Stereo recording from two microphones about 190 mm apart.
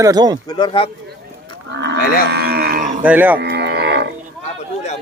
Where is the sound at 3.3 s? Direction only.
55° right (ahead or behind).